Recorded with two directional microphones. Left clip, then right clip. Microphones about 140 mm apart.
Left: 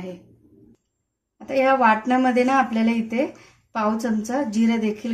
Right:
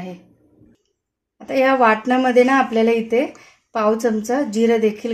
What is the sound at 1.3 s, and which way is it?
A woman's voice, 65° right (ahead or behind).